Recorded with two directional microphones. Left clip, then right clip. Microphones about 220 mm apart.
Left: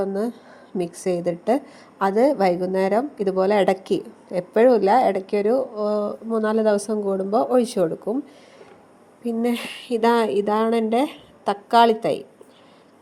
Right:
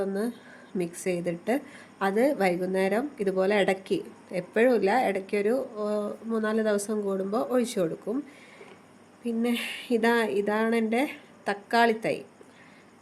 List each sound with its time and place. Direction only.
0.0 s a woman's voice: 15° left (ahead or behind)
9.2 s a woman's voice: 20° left (ahead or behind)